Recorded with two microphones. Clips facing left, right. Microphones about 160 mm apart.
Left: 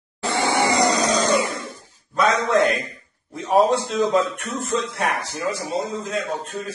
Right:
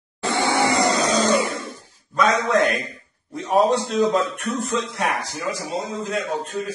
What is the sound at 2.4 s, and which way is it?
Speech, centre (ahead or behind).